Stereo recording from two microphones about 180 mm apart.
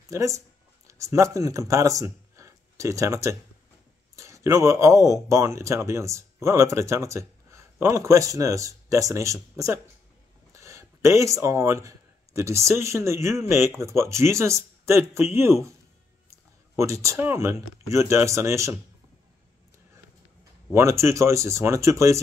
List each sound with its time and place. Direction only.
0.1 s speech: 15° right (ahead or behind)
10.5 s a sound: 15° right (ahead or behind)
12.4 s speech: 15° right (ahead or behind)
20.7 s speech: 15° right (ahead or behind)